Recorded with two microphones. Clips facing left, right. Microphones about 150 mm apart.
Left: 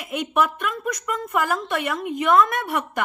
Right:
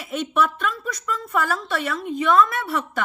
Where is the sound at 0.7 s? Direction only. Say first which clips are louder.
Left 2 dB; 55° left (ahead or behind).